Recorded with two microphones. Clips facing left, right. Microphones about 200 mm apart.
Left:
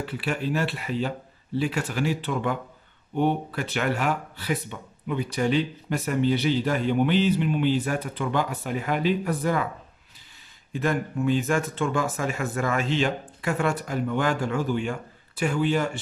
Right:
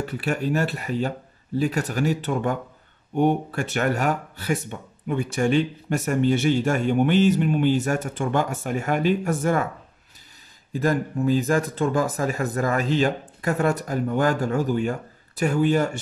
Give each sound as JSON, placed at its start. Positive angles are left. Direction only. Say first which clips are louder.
{"t": 0.0, "sound": "speech", "louder": "right 3 dB", "side_deg": -45}
{"t": 10.7, "sound": "speech", "louder": "right 3 dB", "side_deg": -35}